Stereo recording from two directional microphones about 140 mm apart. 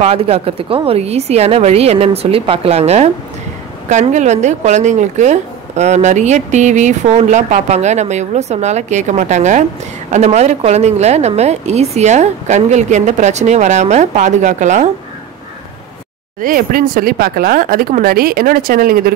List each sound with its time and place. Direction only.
0.0 s speech: 45° right (ahead or behind); by 14.9 s 60° right (ahead or behind)
16.3 s speech: 85° right